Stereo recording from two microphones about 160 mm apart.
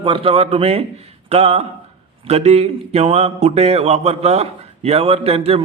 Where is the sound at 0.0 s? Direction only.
35° right (ahead or behind).